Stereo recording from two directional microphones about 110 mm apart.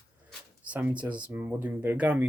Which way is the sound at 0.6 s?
15° right (ahead or behind).